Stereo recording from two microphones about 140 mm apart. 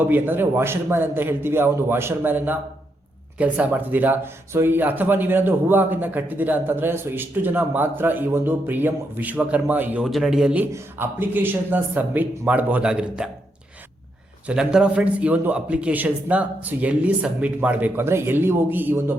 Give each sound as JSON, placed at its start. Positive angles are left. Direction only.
{"t": 0.0, "sound": "speech", "side_deg": -15}
{"t": 10.0, "sound": "speech", "side_deg": 0}
{"t": 14.4, "sound": "speech", "side_deg": -5}